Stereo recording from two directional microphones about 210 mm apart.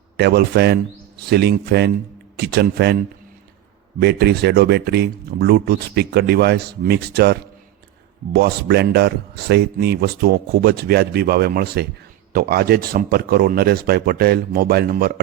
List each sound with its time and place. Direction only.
0.2 s speech: 50° right (ahead or behind)
4.0 s speech: 50° right (ahead or behind)